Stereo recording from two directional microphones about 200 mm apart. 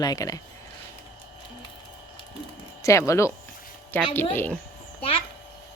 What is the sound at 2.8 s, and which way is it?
Speech, 15° left (ahead or behind).